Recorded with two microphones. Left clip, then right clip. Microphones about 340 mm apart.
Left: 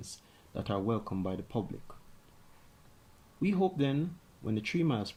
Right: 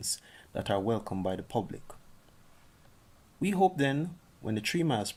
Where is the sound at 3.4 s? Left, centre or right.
Right.